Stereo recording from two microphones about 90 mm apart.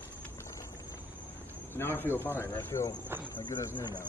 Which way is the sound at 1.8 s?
25° left (ahead or behind).